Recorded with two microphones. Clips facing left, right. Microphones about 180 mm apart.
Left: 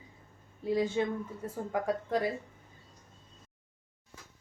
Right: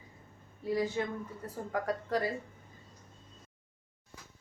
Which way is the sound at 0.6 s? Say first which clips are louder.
Left 3 dB; 20° left (ahead or behind).